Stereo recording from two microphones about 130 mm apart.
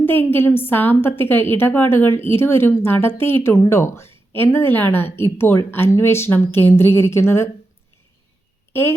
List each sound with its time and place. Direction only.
0.0 s a woman's voice: 15° left (ahead or behind)